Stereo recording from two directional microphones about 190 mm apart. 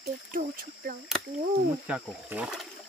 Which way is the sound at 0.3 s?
45° right (ahead or behind).